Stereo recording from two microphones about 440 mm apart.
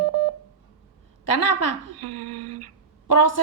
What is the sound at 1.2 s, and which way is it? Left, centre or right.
Speech, left.